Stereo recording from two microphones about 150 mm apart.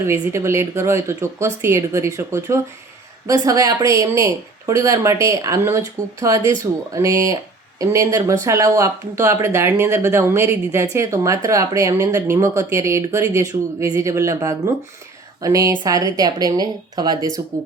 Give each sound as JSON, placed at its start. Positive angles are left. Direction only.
{"t": 0.0, "sound": "speech", "side_deg": -15}